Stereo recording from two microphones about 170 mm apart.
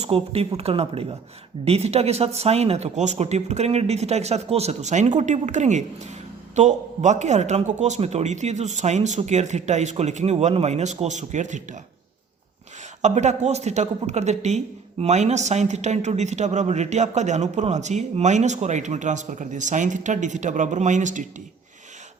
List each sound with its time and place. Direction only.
0.0 s speech: 35° right (ahead or behind)
13.0 s speech: 40° right (ahead or behind)